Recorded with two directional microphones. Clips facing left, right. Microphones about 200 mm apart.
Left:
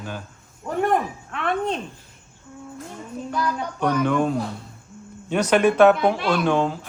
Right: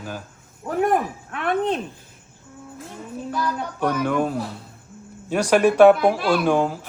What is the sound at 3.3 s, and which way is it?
Speech, centre (ahead or behind).